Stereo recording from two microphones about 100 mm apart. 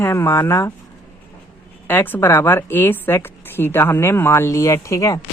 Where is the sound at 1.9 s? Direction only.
20° left (ahead or behind).